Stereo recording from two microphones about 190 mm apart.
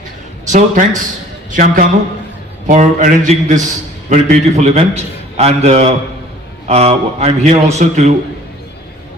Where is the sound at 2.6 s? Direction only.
45° right (ahead or behind).